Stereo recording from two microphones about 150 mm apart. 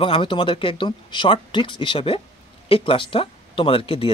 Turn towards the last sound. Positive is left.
turn(degrees=40)  # may be behind; listen again after turning